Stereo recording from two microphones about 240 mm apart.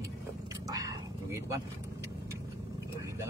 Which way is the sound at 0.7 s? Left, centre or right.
Centre.